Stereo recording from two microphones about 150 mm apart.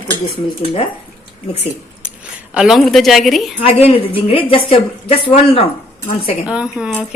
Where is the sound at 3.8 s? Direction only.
40° left (ahead or behind).